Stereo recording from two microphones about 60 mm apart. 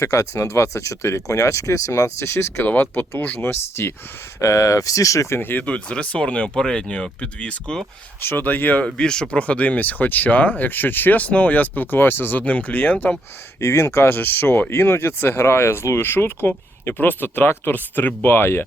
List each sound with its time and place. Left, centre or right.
0.0 s speech: left
2.6 s speech: left
4.4 s speech: left
5.4 s speech: left
5.6 s speech: centre
8.2 s speech: left
8.4 s speech: left
13.6 s speech: left